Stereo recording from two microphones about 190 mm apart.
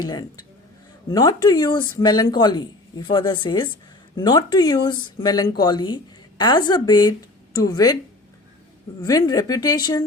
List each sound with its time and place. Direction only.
0.1 s a woman's voice: 20° left (ahead or behind)
9.0 s speech: 20° left (ahead or behind)